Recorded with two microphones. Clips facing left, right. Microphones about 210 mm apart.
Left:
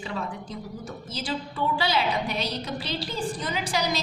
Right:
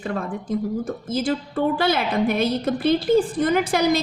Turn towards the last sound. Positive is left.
turn(degrees=-55)  # may be behind; listen again after turning